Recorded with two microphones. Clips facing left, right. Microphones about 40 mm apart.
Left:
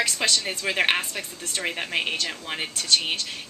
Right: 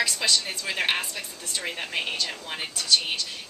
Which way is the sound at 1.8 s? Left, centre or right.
Left.